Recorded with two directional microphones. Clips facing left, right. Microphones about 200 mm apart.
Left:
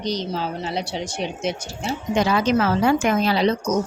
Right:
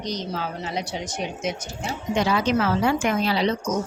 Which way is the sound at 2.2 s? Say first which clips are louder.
Left 2 dB; 45° left (ahead or behind).